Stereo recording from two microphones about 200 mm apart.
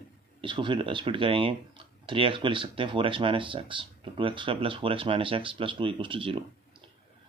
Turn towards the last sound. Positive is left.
turn(degrees=-25)  # may be behind; listen again after turning